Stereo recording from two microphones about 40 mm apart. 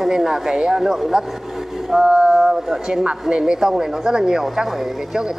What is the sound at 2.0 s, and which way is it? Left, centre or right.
Mantra, right.